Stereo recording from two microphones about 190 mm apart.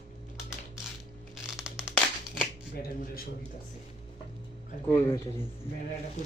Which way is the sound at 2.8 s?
50° left (ahead or behind).